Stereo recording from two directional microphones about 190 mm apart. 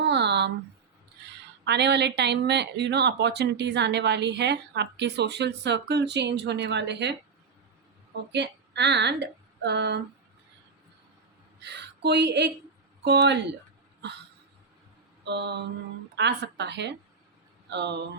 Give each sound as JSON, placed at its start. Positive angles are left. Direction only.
{"t": 0.0, "sound": "a sound", "side_deg": -65}
{"t": 1.6, "sound": "speech", "side_deg": -65}
{"t": 8.3, "sound": "speech", "side_deg": -65}
{"t": 11.6, "sound": "speech", "side_deg": -60}
{"t": 15.2, "sound": "a sound", "side_deg": -65}
{"t": 16.1, "sound": "speech", "side_deg": -65}